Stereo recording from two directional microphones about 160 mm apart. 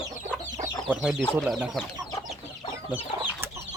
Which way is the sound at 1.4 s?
5° right (ahead or behind).